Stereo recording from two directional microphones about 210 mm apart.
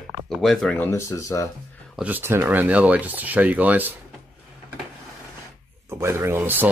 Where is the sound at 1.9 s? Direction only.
10° right (ahead or behind).